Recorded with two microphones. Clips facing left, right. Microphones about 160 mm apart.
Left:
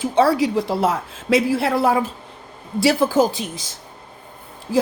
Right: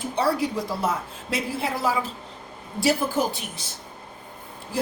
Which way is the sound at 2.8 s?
90° left.